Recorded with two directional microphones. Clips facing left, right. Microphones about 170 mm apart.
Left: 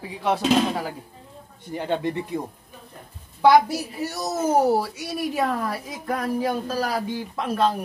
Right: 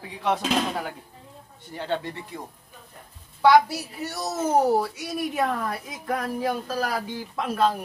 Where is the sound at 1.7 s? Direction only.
15° left (ahead or behind).